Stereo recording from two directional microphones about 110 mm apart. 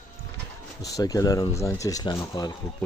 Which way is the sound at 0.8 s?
35° left (ahead or behind).